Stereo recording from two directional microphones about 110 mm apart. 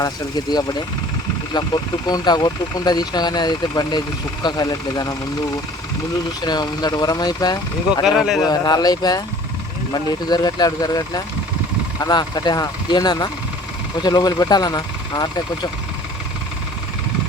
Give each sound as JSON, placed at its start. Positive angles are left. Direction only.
{"t": 1.5, "sound": "speech", "side_deg": 40}
{"t": 6.4, "sound": "speech", "side_deg": 40}
{"t": 8.0, "sound": "speech", "side_deg": -5}
{"t": 8.4, "sound": "speech", "side_deg": 35}